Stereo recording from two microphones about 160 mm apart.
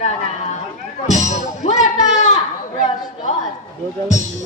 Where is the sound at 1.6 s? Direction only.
45° left (ahead or behind).